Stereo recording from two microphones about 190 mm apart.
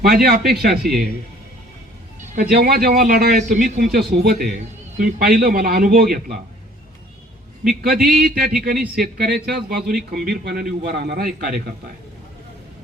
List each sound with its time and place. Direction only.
0.0 s a man's voice: 50° right (ahead or behind)
0.7 s a man's voice: centre (ahead or behind)
2.3 s a man's voice: 50° right (ahead or behind)
7.9 s a man's voice: 50° right (ahead or behind)